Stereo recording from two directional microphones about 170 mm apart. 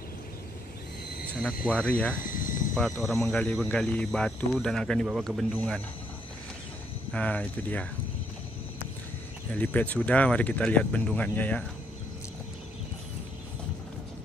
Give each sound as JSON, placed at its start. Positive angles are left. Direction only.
{"t": 1.7, "sound": "speech", "side_deg": 5}
{"t": 2.2, "sound": "cricket", "side_deg": 55}
{"t": 2.7, "sound": "speech", "side_deg": 0}
{"t": 7.1, "sound": "speech", "side_deg": 5}
{"t": 9.5, "sound": "speech", "side_deg": 10}